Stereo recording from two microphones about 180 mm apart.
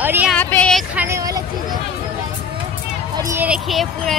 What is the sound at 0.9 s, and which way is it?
Speech, 15° right (ahead or behind).